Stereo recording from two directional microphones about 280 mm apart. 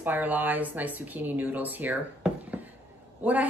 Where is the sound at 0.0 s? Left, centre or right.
Centre.